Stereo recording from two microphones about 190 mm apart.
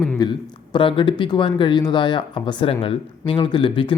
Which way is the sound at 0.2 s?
25° left (ahead or behind).